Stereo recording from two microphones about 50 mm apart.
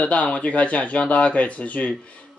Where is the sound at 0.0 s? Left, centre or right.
Left.